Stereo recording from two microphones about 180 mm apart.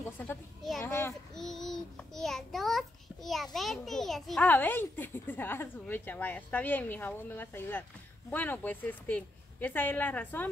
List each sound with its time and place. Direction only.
0.0 s a child's voice: 10° left (ahead or behind)
0.6 s a child's voice: centre (ahead or behind)
0.8 s a child's voice: 15° left (ahead or behind)
1.3 s a child's voice: centre (ahead or behind)